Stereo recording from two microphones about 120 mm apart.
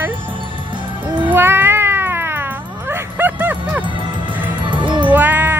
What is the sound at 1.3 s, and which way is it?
Cat, 20° right (ahead or behind).